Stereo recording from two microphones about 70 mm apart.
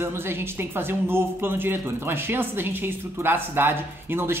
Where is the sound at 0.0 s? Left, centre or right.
Right.